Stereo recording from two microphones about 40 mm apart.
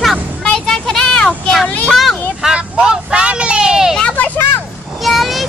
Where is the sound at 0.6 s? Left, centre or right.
Centre.